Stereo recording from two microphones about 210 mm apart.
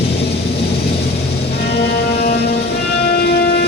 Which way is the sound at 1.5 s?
50° left (ahead or behind).